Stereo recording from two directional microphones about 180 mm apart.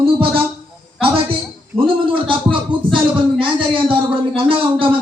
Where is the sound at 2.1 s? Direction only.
30° right (ahead or behind).